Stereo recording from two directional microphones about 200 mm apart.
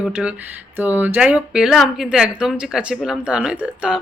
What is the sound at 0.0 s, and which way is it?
Speech, 5° right (ahead or behind).